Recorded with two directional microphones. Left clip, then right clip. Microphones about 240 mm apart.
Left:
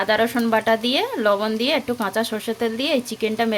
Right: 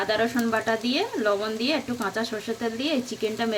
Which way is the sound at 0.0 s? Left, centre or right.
Left.